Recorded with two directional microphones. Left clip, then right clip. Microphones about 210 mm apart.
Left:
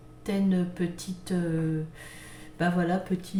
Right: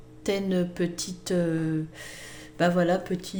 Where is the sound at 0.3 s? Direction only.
50° right (ahead or behind).